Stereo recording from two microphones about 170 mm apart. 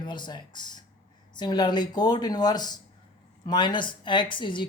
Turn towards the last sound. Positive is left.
turn(degrees=30)  # may be behind; listen again after turning